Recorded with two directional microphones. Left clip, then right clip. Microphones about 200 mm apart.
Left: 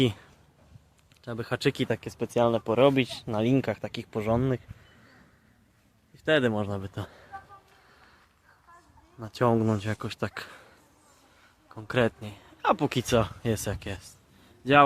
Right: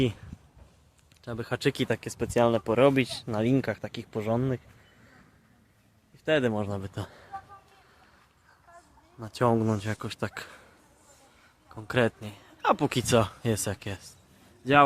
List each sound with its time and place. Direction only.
0.0 s speech: 20° left (ahead or behind)
1.2 s speech: 5° left (ahead or behind)
6.2 s speech: 10° left (ahead or behind)
9.1 s speech: 5° left (ahead or behind)
11.7 s a man's voice: centre (ahead or behind)